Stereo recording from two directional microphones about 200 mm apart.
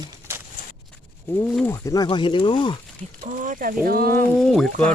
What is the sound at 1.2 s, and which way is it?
Speech, 10° left (ahead or behind).